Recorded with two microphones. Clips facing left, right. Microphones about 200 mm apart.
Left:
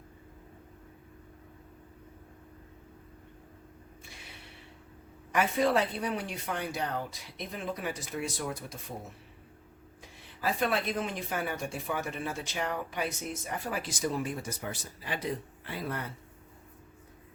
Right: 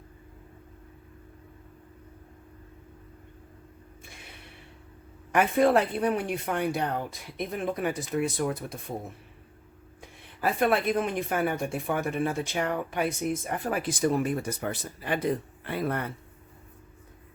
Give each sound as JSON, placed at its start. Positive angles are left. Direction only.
{"t": 5.3, "sound": "a woman's voice", "side_deg": -55}
{"t": 10.0, "sound": "a woman's voice", "side_deg": -55}